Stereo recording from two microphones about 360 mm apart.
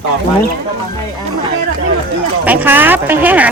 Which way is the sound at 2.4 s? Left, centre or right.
Centre.